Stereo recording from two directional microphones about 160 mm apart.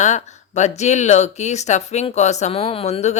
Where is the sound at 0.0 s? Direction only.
45° left (ahead or behind).